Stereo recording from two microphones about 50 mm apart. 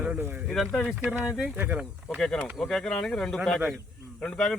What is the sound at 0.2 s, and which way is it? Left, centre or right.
Speech, right.